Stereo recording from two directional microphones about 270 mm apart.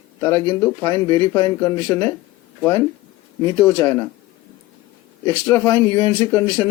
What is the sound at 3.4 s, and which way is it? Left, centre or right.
Speech, centre.